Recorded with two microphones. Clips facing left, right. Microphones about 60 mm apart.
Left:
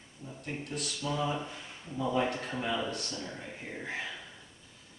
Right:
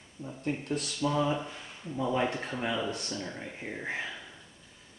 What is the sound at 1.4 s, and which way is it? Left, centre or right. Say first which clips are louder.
Speech: right 1 dB; centre.